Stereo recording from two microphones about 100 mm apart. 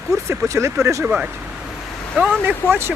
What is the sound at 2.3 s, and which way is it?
Speech, 20° right (ahead or behind).